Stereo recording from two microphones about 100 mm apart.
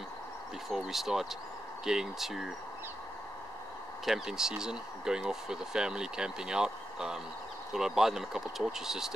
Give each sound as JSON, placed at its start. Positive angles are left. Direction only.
{"t": 0.7, "sound": "speech", "side_deg": -5}
{"t": 4.0, "sound": "speech", "side_deg": -5}